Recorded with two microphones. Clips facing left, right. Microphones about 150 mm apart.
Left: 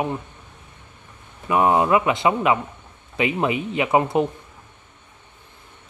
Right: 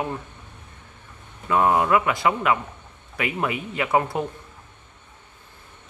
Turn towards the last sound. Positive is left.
turn(degrees=20)  # may be behind; listen again after turning